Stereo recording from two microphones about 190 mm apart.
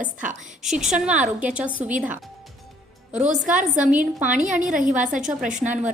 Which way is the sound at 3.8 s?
5° right (ahead or behind).